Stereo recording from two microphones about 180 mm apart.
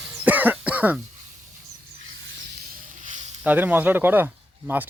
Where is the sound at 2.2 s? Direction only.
90° right.